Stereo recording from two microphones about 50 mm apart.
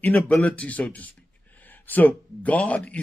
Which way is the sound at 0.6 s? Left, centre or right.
Left.